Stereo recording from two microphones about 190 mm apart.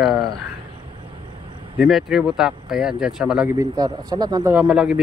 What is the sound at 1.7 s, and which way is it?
Speech, centre (ahead or behind).